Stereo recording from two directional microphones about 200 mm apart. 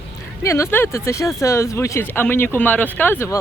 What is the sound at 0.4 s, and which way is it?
Speech, 15° left (ahead or behind).